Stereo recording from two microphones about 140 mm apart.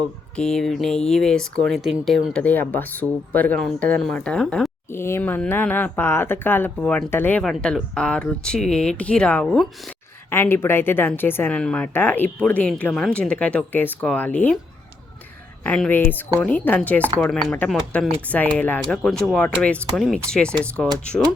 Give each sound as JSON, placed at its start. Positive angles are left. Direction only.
{"t": 0.3, "sound": "speech", "side_deg": 5}
{"t": 2.3, "sound": "speech", "side_deg": 10}
{"t": 4.9, "sound": "speech", "side_deg": 20}
{"t": 10.2, "sound": "speech", "side_deg": 15}
{"t": 15.6, "sound": "speech", "side_deg": 10}